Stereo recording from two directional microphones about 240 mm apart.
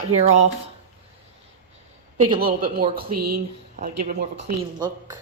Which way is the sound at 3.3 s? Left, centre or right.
Right.